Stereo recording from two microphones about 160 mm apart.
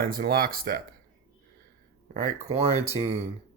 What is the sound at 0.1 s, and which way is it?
Speech, 65° right (ahead or behind).